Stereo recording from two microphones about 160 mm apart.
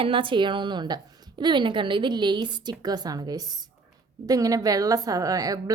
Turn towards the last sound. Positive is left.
turn(degrees=-20)  # may be behind; listen again after turning